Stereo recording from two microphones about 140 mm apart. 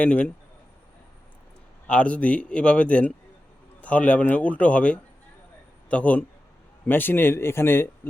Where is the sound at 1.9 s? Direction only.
10° left (ahead or behind).